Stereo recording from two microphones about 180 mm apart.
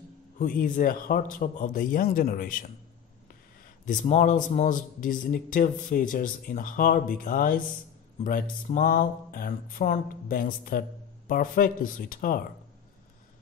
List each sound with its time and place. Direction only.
0.4 s a man's voice: 50° left (ahead or behind)
3.8 s a man's voice: 45° left (ahead or behind)